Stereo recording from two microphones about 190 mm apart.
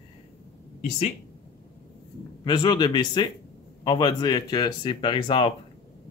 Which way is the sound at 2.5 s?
25° left (ahead or behind).